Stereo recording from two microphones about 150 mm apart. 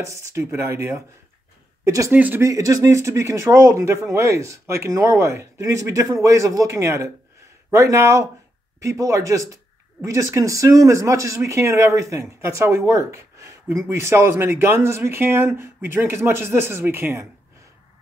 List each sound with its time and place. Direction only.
0.0 s speech: 20° right (ahead or behind)